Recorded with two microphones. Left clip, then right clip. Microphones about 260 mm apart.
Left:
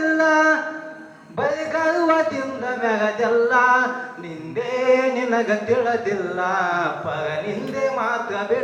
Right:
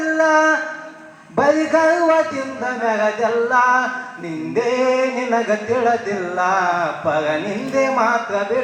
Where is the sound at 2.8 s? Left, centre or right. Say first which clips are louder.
Right 2 dB; right.